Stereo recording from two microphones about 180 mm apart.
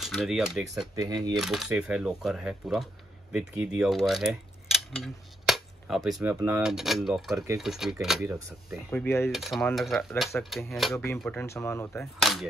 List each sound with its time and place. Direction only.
0.0 s speech: centre (ahead or behind)
0.9 s speech: 20° right (ahead or behind)
1.3 s speech: centre (ahead or behind)
8.9 s speech: 15° left (ahead or behind)
9.3 s speech: centre (ahead or behind); by 12.0 s 15° left (ahead or behind)
12.0 s speech: centre (ahead or behind)